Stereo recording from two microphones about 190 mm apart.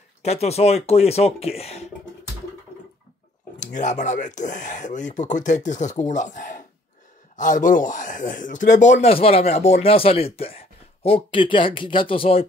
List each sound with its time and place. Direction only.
0.2 s speech: 35° left (ahead or behind)
3.5 s speech: 40° left (ahead or behind)